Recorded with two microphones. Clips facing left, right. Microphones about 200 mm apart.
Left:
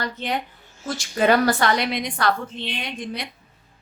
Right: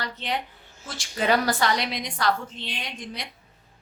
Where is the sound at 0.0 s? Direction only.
50° left (ahead or behind).